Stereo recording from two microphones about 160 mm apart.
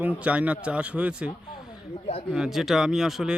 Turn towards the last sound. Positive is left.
turn(degrees=-5)  # may be behind; listen again after turning